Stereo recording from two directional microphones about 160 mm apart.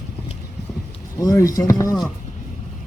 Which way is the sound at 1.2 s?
20° left (ahead or behind).